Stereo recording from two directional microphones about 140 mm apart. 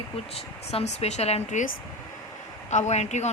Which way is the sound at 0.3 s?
45° left (ahead or behind).